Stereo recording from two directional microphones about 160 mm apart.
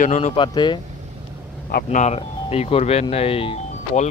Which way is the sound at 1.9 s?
45° left (ahead or behind).